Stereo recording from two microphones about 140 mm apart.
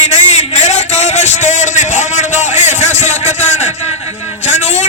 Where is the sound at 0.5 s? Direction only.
55° left (ahead or behind).